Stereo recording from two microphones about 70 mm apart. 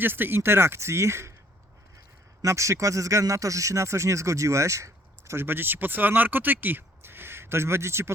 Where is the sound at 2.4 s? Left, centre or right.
Right.